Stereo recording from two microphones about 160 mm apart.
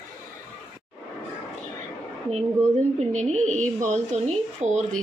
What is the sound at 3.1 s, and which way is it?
Speech, 45° right (ahead or behind).